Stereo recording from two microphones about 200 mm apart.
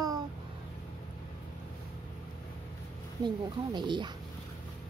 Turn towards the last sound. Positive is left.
turn(degrees=-20)  # may be behind; listen again after turning